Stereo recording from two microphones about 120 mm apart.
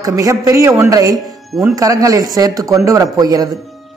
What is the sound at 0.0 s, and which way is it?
A man's voice, 30° right (ahead or behind).